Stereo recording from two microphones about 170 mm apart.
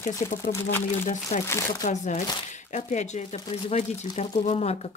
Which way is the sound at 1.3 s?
45° left (ahead or behind).